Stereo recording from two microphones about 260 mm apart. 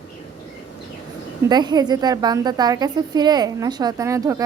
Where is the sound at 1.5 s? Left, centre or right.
Centre.